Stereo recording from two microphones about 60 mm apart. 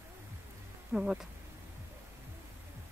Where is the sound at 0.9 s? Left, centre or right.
Centre.